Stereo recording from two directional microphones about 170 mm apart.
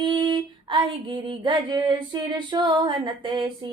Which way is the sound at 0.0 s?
25° right (ahead or behind).